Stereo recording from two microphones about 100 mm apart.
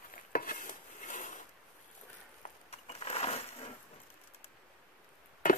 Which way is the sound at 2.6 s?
85° left.